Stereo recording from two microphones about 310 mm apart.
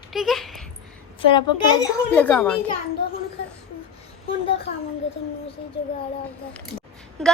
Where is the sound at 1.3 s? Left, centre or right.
Centre.